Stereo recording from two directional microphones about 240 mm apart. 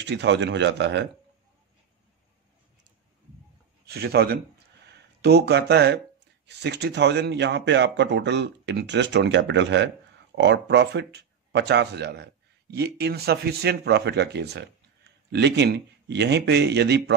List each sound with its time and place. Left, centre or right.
0.0 s speech: right
3.8 s a man's voice: right